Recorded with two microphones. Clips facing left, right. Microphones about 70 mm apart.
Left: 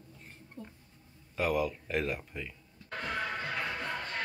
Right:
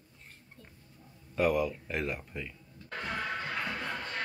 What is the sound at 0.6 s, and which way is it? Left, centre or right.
Speech, left.